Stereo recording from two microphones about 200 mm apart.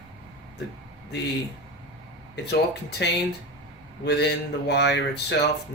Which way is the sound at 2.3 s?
55° left (ahead or behind).